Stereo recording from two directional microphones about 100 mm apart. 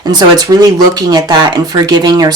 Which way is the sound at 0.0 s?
40° right (ahead or behind).